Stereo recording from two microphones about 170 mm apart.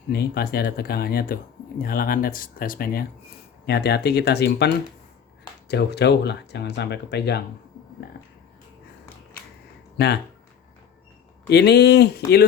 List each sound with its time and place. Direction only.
0.1 s speech: 65° left (ahead or behind)
3.7 s speech: 75° left (ahead or behind)
10.0 s speech: 75° left (ahead or behind)
11.4 s speech: 80° left